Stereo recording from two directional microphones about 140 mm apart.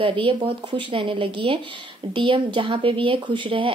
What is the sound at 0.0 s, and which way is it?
Speech, 40° right (ahead or behind).